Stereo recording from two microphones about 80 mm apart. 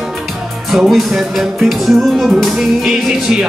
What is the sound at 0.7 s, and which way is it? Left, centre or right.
Music, centre.